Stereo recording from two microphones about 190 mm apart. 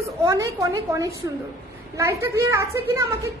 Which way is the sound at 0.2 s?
15° right (ahead or behind).